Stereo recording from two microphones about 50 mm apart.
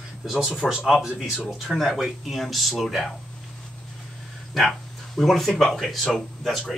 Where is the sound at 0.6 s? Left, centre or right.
Centre.